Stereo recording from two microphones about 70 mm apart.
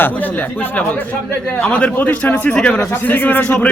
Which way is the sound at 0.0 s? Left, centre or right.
Left.